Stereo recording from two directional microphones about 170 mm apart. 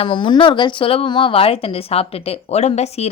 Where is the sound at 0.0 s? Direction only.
30° left (ahead or behind).